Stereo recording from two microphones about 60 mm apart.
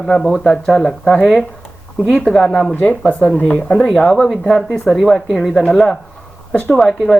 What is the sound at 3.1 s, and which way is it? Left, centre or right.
Speech, left.